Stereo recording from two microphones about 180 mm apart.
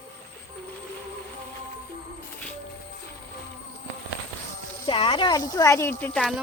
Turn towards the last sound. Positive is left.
turn(degrees=0)  # may be behind; listen again after turning